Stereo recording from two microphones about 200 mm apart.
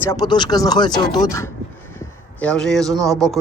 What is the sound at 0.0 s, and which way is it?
Speech, 15° left (ahead or behind).